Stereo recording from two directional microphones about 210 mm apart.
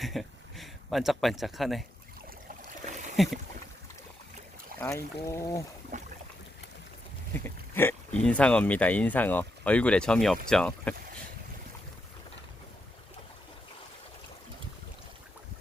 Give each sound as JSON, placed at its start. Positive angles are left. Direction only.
{"t": 0.0, "sound": "speech", "side_deg": 0}
{"t": 3.2, "sound": "speech", "side_deg": 0}
{"t": 4.8, "sound": "speech", "side_deg": 10}
{"t": 5.9, "sound": "boat", "side_deg": -35}
{"t": 7.3, "sound": "speech", "side_deg": 10}